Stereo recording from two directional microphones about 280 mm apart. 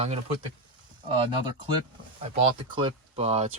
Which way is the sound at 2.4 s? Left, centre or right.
Centre.